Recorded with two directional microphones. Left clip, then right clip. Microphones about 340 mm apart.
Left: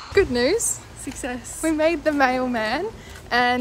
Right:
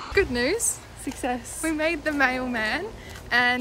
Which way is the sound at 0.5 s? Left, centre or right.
Centre.